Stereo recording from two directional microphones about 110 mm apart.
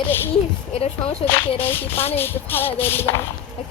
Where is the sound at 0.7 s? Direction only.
65° left (ahead or behind).